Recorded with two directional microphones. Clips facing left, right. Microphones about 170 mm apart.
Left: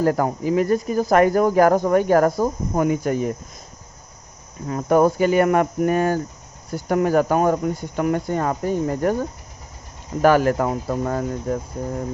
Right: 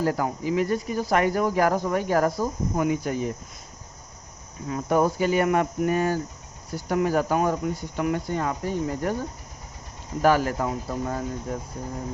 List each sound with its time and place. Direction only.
0.0 s speech: 50° left (ahead or behind)
4.7 s speech: 55° left (ahead or behind)
10.2 s speech: 60° left (ahead or behind)